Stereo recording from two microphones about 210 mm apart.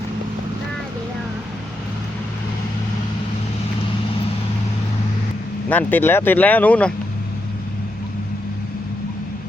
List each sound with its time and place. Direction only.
5.6 s speech: 10° left (ahead or behind)